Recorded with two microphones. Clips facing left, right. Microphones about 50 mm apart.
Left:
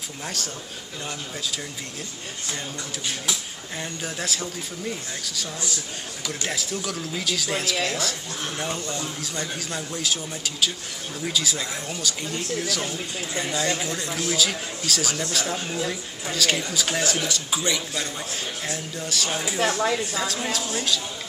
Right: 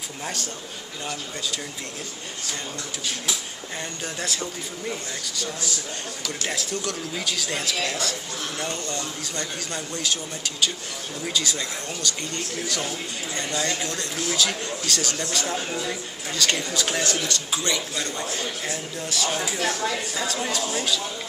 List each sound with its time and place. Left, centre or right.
0.2 s speech: centre
4.0 s speech: centre
6.2 s speech: centre
19.6 s speech: left
20.2 s speech: centre